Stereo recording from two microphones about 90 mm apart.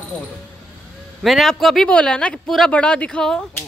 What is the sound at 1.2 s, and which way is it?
A man's voice, centre (ahead or behind).